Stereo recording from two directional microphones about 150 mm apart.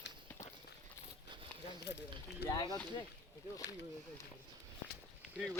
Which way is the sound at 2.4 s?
90° left.